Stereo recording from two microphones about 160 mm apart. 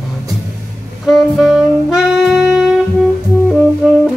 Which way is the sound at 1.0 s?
Centre (ahead or behind).